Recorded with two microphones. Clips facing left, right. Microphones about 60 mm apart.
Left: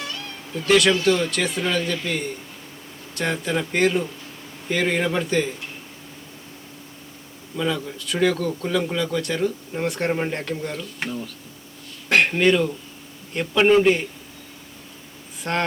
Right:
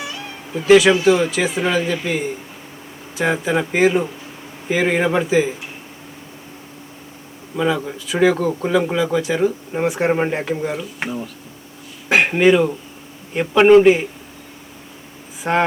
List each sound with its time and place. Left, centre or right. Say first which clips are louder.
0.0 s speech: right 3 dB; centre
7.5 s speech: right 5 dB; centre
7.9 s speech: right 5 dB; centre
10.1 s speech: right 6 dB; right
10.3 s speech: right 6 dB; centre
15.5 s speech: right 7 dB; centre